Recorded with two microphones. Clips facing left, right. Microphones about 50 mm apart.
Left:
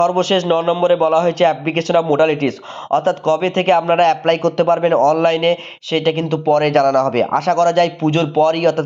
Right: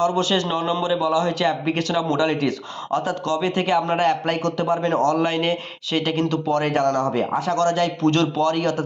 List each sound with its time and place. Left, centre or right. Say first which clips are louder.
0.0 s speech: left 5 dB; left
0.4 s a man's voice: left 8 dB; left
4.9 s speech: left 6 dB; left
6.9 s speech: left 7 dB; left
7.5 s speech: left 7 dB; left
8.0 s a man's voice: left 2 dB; left
8.5 s speech: left 7 dB; left